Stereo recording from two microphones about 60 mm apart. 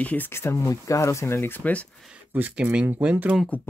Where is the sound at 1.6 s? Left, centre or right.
Left.